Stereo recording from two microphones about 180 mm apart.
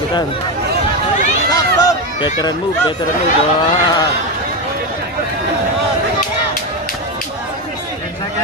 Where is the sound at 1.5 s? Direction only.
20° left (ahead or behind).